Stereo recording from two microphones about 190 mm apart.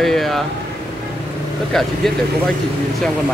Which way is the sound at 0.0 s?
Centre (ahead or behind).